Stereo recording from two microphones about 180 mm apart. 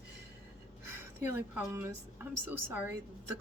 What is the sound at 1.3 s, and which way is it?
Speech, 15° right (ahead or behind).